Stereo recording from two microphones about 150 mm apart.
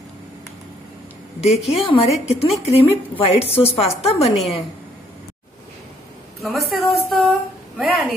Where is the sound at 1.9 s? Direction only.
35° left (ahead or behind).